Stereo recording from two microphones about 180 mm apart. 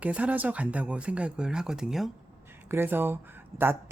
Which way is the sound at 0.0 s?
10° right (ahead or behind).